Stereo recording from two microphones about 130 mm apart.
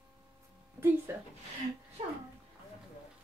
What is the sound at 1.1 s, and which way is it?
Speech, 15° right (ahead or behind).